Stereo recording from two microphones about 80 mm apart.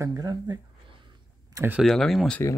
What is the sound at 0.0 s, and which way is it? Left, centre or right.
Speech, right.